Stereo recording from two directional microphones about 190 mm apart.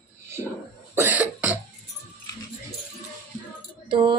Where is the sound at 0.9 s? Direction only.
10° right (ahead or behind).